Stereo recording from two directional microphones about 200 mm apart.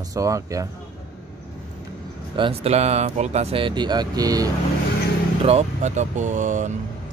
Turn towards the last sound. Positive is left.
turn(degrees=-40)  # may be behind; listen again after turning